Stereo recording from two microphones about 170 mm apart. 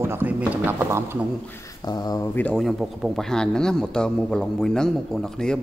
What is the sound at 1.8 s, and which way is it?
Speech, 25° left (ahead or behind).